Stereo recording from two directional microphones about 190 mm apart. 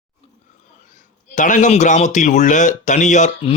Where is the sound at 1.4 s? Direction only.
40° left (ahead or behind).